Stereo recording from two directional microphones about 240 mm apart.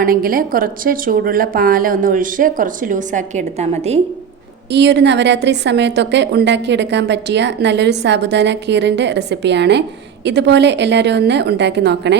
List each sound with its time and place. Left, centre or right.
0.0 s a woman's voice: right
4.7 s a woman's voice: right